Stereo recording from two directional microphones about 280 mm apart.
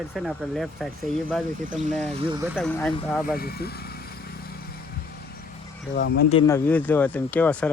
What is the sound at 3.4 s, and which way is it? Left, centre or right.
Speech, left.